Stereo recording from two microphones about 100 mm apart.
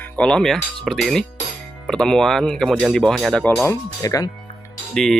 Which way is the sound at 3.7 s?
35° left (ahead or behind).